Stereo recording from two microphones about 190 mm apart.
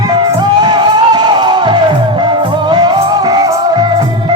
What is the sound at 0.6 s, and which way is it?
Music, 25° right (ahead or behind).